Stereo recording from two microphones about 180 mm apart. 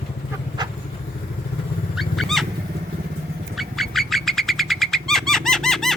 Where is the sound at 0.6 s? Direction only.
25° right (ahead or behind).